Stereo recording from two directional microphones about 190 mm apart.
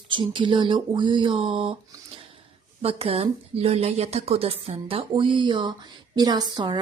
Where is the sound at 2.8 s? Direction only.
30° right (ahead or behind).